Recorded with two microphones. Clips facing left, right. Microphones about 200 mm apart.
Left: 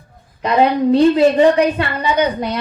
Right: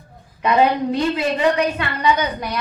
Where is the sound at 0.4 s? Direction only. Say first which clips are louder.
Left 3 dB; 35° left (ahead or behind).